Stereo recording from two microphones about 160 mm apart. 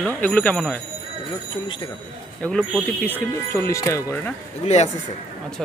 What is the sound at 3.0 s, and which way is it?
Speech, 10° left (ahead or behind).